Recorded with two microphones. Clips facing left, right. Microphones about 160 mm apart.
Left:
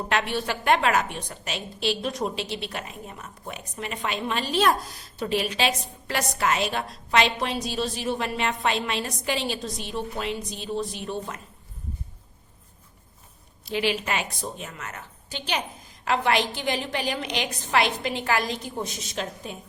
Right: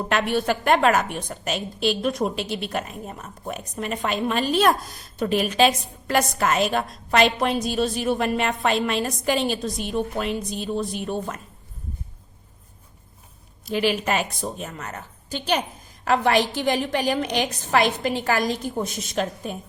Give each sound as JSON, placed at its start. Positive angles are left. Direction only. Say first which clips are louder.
{"t": 0.1, "sound": "a woman's voice", "louder": "right 5 dB", "side_deg": -50}
{"t": 13.7, "sound": "a woman's voice", "louder": "right 4 dB", "side_deg": -45}